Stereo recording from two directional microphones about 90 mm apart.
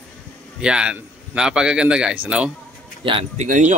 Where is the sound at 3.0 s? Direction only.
75° right (ahead or behind).